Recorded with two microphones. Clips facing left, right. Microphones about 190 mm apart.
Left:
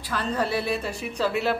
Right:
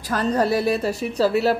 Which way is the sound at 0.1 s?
40° right (ahead or behind).